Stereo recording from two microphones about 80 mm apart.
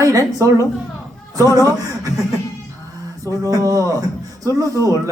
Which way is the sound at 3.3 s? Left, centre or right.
Right.